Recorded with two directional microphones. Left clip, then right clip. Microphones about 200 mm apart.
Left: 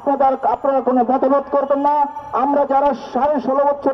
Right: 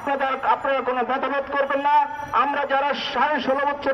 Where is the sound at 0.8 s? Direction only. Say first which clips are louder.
Left 7 dB; 20° left (ahead or behind).